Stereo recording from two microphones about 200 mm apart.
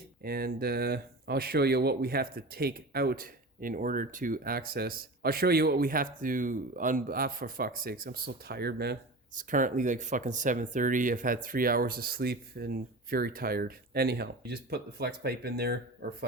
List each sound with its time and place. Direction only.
0.2 s speech: 50° right (ahead or behind)